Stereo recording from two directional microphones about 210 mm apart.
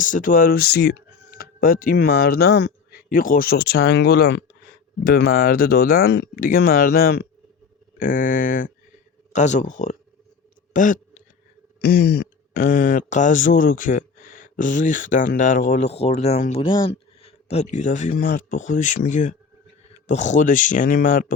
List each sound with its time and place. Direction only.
0.0 s speech: 40° left (ahead or behind)
10.8 s a sound: 40° left (ahead or behind)
11.8 s speech: 50° left (ahead or behind)